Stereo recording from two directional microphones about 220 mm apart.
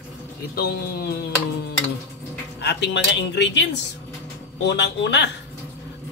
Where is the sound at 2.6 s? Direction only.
50° left (ahead or behind).